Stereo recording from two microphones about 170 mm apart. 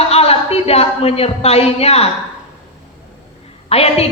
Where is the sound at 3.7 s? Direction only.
35° left (ahead or behind).